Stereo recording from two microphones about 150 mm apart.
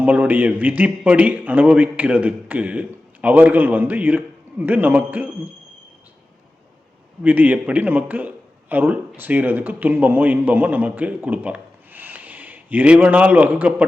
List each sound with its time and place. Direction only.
0.0 s a man's voice: 10° right (ahead or behind)
7.2 s a man's voice: 10° right (ahead or behind)